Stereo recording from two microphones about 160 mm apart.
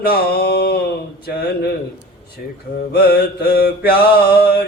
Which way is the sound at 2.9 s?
70° left (ahead or behind).